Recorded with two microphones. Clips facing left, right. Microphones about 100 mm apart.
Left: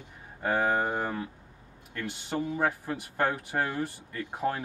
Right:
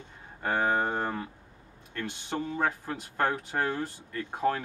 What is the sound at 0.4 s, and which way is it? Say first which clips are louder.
Speech: even; 10° left (ahead or behind).